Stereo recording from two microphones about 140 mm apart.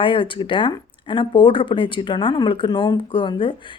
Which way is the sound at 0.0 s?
35° left (ahead or behind).